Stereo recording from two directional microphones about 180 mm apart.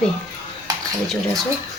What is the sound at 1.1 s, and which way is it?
Speech, centre (ahead or behind).